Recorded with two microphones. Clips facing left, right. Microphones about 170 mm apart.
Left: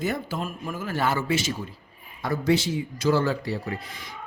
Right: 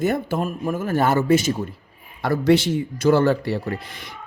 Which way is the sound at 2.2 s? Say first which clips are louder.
Right 6 dB; 70° right (ahead or behind).